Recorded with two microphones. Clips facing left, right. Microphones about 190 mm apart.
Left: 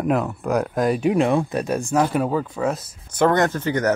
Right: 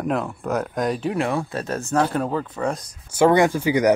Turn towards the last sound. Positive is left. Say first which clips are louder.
# right 3 dB
turn(degrees=-10)  # may be behind; listen again after turning